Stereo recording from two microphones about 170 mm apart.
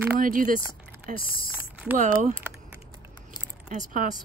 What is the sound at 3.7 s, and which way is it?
Speech, 50° right (ahead or behind).